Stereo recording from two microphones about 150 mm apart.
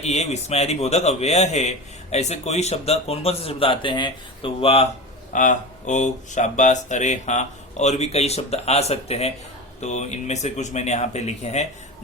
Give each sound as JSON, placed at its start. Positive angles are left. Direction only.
{"t": 0.0, "sound": "a man's voice", "side_deg": 45}
{"t": 5.3, "sound": "a man's voice", "side_deg": 55}